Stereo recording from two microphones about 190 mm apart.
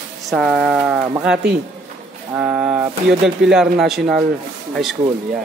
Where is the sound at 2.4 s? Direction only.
5° right (ahead or behind).